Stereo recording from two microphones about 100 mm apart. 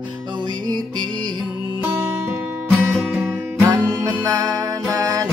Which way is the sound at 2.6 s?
Centre (ahead or behind).